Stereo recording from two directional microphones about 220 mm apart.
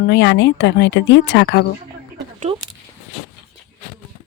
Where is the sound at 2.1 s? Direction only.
30° right (ahead or behind).